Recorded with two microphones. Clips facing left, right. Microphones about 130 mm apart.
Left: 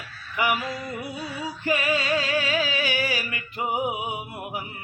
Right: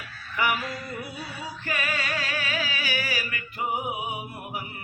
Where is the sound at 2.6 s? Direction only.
30° left (ahead or behind).